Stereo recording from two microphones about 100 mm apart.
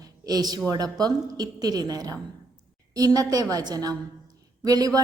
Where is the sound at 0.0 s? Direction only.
40° right (ahead or behind).